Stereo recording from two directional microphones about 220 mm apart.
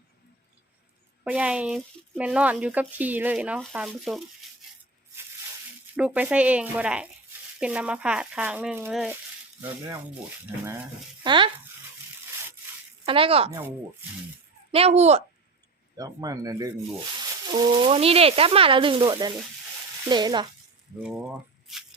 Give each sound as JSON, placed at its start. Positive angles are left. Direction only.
{"t": 1.2, "sound": "speech", "side_deg": -5}
{"t": 4.4, "sound": "a sound", "side_deg": 0}
{"t": 6.0, "sound": "speech", "side_deg": -5}
{"t": 13.1, "sound": "speech", "side_deg": -25}
{"t": 14.7, "sound": "speech", "side_deg": -25}
{"t": 16.0, "sound": "speech", "side_deg": -15}
{"t": 21.0, "sound": "speech", "side_deg": -5}